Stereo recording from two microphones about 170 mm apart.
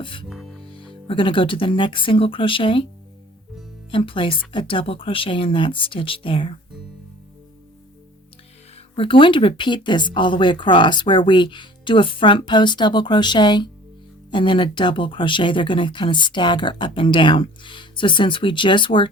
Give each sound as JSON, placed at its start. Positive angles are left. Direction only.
{"t": 0.0, "sound": "music", "side_deg": 30}
{"t": 0.3, "sound": "music", "side_deg": 0}
{"t": 1.0, "sound": "speech", "side_deg": 30}
{"t": 3.9, "sound": "speech", "side_deg": 30}
{"t": 9.0, "sound": "speech", "side_deg": 30}